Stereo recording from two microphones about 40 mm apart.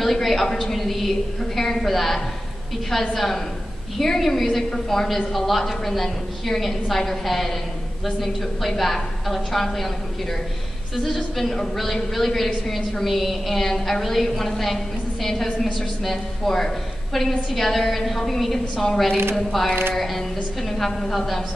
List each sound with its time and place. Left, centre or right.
0.0 s a sound: centre
2.9 s a woman's voice: centre
11.0 s a woman's voice: centre